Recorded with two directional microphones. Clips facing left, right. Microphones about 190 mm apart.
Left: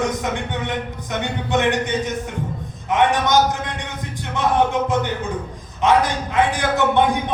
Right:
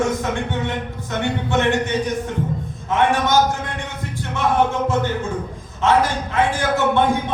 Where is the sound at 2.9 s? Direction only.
15° left (ahead or behind).